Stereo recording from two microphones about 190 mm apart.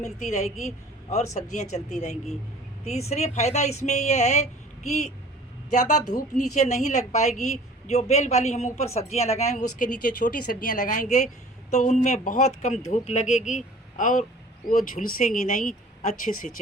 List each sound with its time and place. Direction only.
0.0 s a woman's voice: 40° left (ahead or behind)
6.0 s a woman's voice: 20° left (ahead or behind)
6.3 s a woman's voice: 40° left (ahead or behind)